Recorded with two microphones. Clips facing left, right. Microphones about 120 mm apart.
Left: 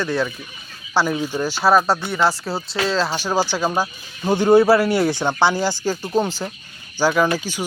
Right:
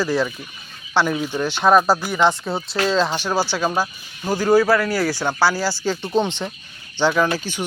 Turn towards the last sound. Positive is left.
turn(degrees=10)  # may be behind; listen again after turning